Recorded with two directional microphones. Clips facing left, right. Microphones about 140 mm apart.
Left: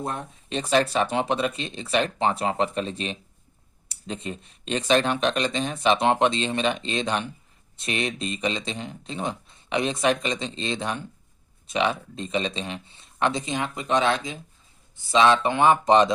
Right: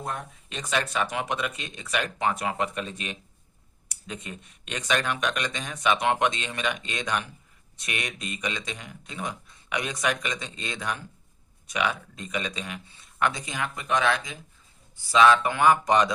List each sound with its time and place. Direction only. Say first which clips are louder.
0.0 s speech: left 3 dB; 30° left (ahead or behind)